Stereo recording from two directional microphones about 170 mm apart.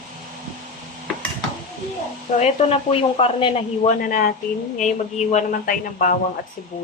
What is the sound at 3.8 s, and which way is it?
Speech, 55° left (ahead or behind).